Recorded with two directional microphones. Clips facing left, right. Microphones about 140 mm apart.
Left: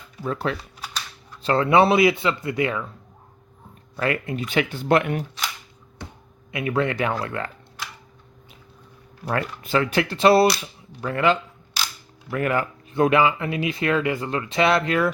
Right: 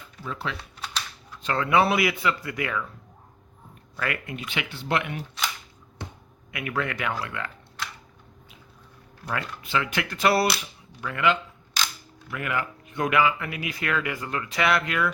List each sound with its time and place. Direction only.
0.2 s speech: 45° left (ahead or behind)
0.5 s camera: centre (ahead or behind)
1.4 s speech: 30° left (ahead or behind)
3.9 s speech: 30° left (ahead or behind)
4.4 s speech: 45° left (ahead or behind)
6.5 s speech: 25° left (ahead or behind)
9.2 s speech: 40° left (ahead or behind)